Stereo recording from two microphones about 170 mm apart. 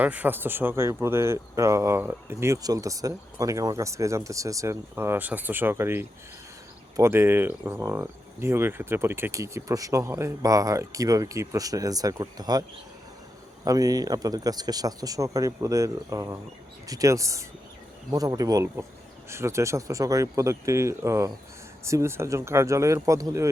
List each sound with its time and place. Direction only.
0.0 s speech: 10° right (ahead or behind)
13.7 s speech: 20° right (ahead or behind)